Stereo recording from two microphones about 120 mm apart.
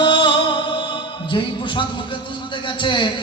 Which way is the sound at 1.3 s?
45° left (ahead or behind).